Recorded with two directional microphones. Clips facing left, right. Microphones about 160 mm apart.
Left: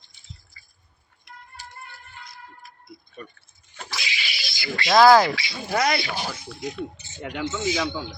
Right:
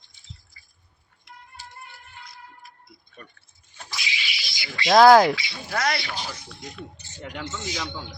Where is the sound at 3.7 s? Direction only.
90° left; by 4.3 s 60° left (ahead or behind).